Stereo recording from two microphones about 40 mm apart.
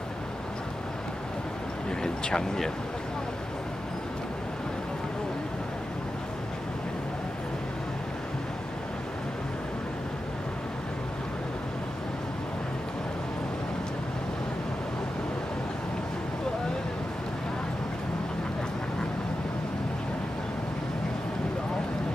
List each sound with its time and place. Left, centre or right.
1.9 s speech: centre